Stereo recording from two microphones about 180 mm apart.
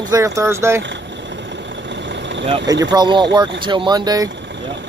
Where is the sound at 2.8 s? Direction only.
25° right (ahead or behind).